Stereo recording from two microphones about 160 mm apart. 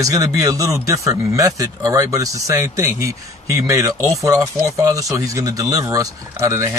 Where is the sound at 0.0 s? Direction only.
20° right (ahead or behind).